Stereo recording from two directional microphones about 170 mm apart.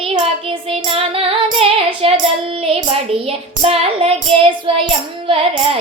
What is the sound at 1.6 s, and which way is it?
Child singing, 35° right (ahead or behind).